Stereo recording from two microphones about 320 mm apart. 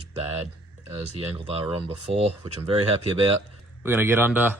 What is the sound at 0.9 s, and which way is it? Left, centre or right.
Speech, centre.